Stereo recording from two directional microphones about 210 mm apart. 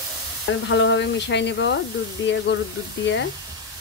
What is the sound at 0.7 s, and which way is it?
Speech, 60° left (ahead or behind).